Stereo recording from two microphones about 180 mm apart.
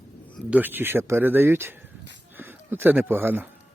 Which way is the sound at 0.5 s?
10° right (ahead or behind).